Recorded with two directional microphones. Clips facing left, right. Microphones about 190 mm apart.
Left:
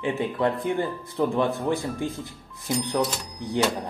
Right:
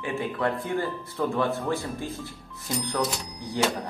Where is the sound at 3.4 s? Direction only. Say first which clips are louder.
Left 3 dB; 20° left (ahead or behind).